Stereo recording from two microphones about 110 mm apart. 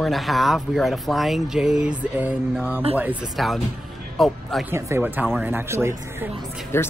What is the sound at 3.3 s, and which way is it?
Speech, centre (ahead or behind).